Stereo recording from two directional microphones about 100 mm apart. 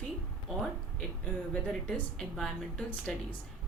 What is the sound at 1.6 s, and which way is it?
A woman's voice, 10° left (ahead or behind).